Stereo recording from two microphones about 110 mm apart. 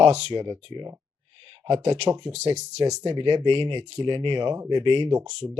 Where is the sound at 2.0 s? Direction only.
45° right (ahead or behind).